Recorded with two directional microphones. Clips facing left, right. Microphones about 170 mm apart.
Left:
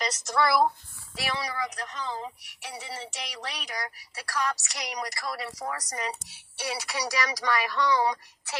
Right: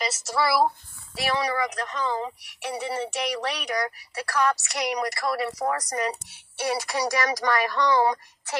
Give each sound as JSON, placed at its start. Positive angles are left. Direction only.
{"t": 0.0, "sound": "speech", "side_deg": -5}
{"t": 1.3, "sound": "speech", "side_deg": -65}